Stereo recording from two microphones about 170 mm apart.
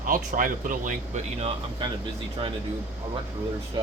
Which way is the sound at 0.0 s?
55° right (ahead or behind).